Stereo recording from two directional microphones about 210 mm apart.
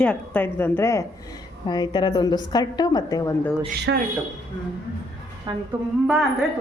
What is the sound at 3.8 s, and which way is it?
Speech, 50° right (ahead or behind).